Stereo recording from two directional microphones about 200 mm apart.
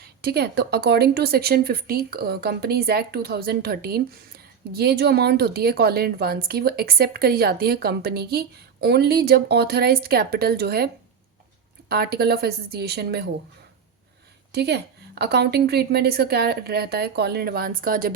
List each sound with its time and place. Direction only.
0.0 s speech: 50° right (ahead or behind)
11.9 s speech: 50° right (ahead or behind)
14.5 s speech: 55° right (ahead or behind)